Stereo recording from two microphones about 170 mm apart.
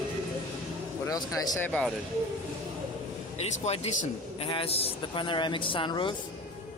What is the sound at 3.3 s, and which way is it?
Speech, 40° left (ahead or behind).